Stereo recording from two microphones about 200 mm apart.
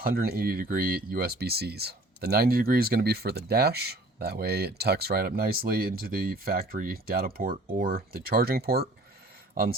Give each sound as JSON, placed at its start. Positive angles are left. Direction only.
{"t": 0.0, "sound": "speech", "side_deg": -50}